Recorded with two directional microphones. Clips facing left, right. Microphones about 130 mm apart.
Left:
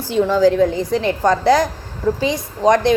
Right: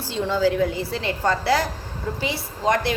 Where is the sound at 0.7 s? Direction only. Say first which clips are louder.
Left 8 dB; 15° left (ahead or behind).